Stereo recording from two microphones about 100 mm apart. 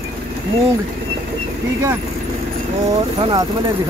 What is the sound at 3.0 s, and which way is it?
Speech, 65° right (ahead or behind).